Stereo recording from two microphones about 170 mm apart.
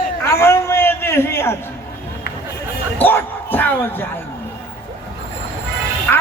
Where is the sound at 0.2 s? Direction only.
15° left (ahead or behind).